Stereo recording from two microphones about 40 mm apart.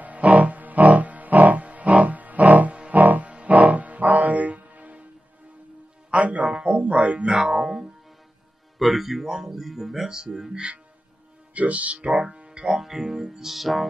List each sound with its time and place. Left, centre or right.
0.0 s music: right
6.0 s music: right
6.4 s a sound: right
6.7 s music: right
7.2 s music: centre
8.7 s speech: centre
11.5 s speech: right
12.6 s speech: centre